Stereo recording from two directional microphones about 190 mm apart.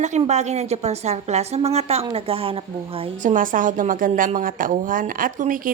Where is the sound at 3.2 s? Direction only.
45° right (ahead or behind).